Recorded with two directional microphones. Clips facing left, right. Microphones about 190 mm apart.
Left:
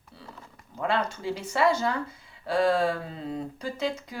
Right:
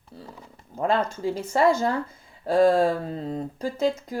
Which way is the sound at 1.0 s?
50° right (ahead or behind).